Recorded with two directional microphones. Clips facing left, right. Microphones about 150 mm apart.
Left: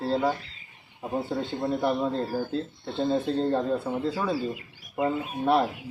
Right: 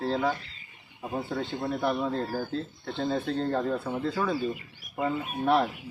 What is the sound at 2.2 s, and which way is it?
Speech, centre (ahead or behind).